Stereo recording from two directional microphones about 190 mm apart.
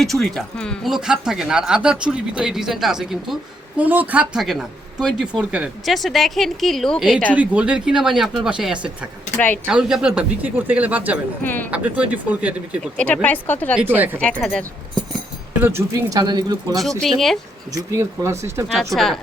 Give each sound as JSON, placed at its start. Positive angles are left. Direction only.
{"t": 0.0, "sound": "speech", "side_deg": 0}
{"t": 11.4, "sound": "speech", "side_deg": 10}
{"t": 11.7, "sound": "speech", "side_deg": -10}
{"t": 12.8, "sound": "speech", "side_deg": 5}
{"t": 13.7, "sound": "speech", "side_deg": -10}
{"t": 14.2, "sound": "speech", "side_deg": 5}
{"t": 15.5, "sound": "speech", "side_deg": -10}
{"t": 17.0, "sound": "speech", "side_deg": 0}
{"t": 17.7, "sound": "speech", "side_deg": -15}
{"t": 18.9, "sound": "speech", "side_deg": 0}